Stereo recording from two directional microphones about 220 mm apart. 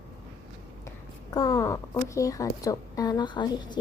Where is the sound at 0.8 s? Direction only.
15° left (ahead or behind).